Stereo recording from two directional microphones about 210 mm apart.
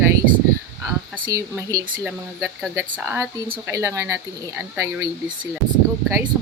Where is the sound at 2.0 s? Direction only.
5° right (ahead or behind).